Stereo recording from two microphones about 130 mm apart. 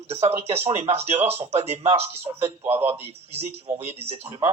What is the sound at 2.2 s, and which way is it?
Speech, 15° right (ahead or behind).